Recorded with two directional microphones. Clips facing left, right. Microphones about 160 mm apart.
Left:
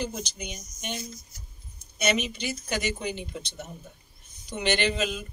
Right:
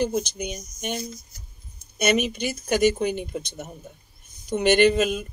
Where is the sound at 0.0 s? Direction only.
50° right (ahead or behind).